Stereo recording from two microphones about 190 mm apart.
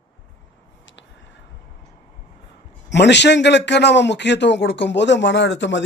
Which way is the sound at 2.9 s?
65° left (ahead or behind).